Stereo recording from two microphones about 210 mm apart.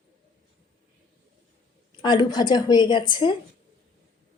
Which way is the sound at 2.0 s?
20° left (ahead or behind).